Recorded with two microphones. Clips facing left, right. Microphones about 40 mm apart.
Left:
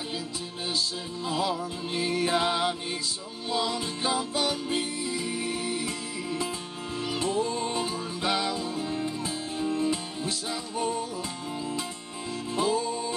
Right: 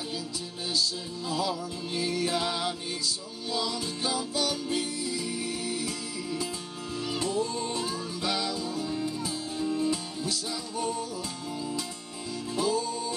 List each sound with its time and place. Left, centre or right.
0.7 s music: left
7.1 s music: left
12.5 s music: left